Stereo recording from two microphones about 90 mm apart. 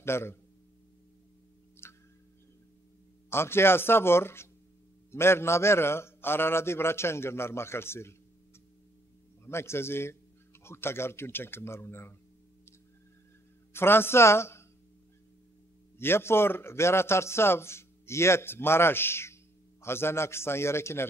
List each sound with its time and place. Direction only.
0.0 s a man's voice: 25° left (ahead or behind)
1.8 s tick: 25° left (ahead or behind)
3.3 s a man's voice: 25° left (ahead or behind)
9.5 s a man's voice: 30° left (ahead or behind)
13.7 s a man's voice: 25° left (ahead or behind)
16.0 s a man's voice: 25° left (ahead or behind)